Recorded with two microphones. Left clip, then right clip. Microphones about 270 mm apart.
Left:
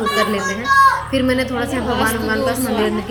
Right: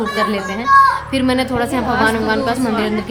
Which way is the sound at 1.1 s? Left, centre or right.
Centre.